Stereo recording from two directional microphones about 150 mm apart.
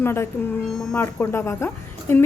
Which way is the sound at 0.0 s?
15° left (ahead or behind).